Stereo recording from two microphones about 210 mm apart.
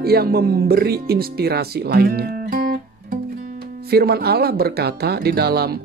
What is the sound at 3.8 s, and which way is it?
Speech, 50° right (ahead or behind).